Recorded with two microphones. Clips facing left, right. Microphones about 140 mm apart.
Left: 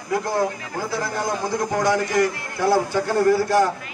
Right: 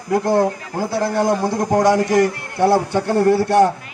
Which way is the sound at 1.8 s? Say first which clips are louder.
Right 5 dB; 75° right (ahead or behind).